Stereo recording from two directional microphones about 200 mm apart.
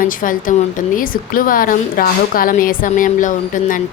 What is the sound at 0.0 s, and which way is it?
A woman's voice, 40° left (ahead or behind).